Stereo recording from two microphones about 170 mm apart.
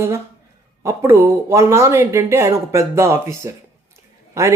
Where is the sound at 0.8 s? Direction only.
15° right (ahead or behind).